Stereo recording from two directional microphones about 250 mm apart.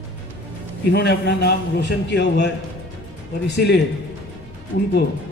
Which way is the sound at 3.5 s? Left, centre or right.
Left.